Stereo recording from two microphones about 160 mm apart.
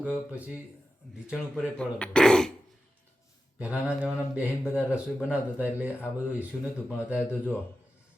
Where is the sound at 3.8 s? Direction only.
10° right (ahead or behind).